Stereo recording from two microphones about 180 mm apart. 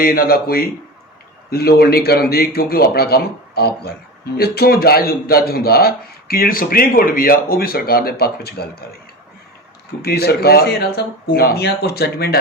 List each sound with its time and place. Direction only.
0.0 s a man's voice: 55° left (ahead or behind)
10.0 s a man's voice: 60° left (ahead or behind)